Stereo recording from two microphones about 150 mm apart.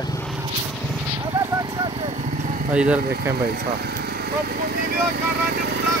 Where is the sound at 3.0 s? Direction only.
90° right.